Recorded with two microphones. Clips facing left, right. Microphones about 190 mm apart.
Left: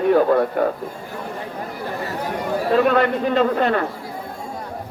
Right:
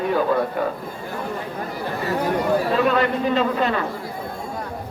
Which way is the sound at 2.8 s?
55° left (ahead or behind).